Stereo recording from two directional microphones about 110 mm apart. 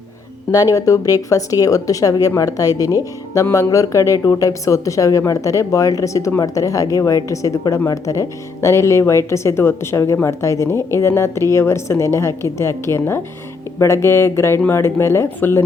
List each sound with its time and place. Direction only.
0.5 s speech: 30° left (ahead or behind)